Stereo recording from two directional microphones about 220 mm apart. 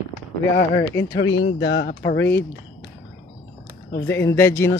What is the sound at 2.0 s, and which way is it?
Speech, 10° left (ahead or behind).